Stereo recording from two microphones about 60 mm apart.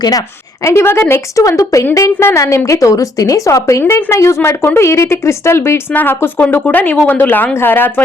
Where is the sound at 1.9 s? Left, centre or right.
Left.